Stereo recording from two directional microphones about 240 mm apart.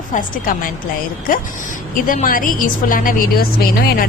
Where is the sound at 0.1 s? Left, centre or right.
Left.